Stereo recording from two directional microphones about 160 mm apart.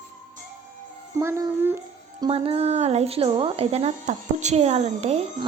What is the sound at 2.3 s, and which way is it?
Speech, 35° right (ahead or behind).